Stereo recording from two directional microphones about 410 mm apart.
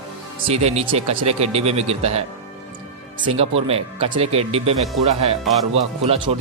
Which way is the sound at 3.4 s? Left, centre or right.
Centre.